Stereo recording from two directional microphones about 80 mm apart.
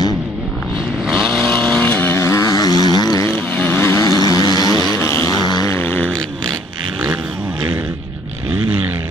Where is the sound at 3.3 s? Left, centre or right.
Left.